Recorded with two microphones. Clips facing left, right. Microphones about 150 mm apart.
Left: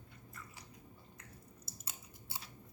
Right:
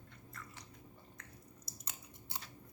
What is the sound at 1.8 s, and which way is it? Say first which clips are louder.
Biting: right 2 dB; 5° left (ahead or behind).